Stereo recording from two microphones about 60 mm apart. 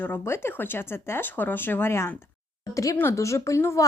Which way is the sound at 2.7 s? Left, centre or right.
Left.